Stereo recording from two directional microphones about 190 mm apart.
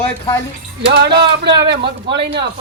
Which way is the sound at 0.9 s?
60° right (ahead or behind).